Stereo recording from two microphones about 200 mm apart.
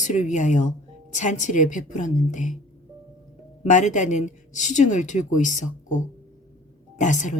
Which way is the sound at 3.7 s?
40° left (ahead or behind).